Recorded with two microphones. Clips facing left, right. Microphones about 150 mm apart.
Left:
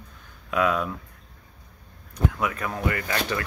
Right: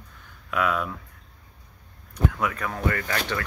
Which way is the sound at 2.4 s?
20° left (ahead or behind).